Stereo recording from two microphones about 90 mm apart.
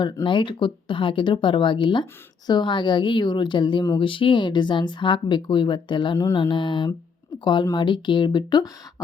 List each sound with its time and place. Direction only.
0.3 s speech: 65° left (ahead or behind)
3.9 s speech: 75° left (ahead or behind); by 8.7 s 50° left (ahead or behind)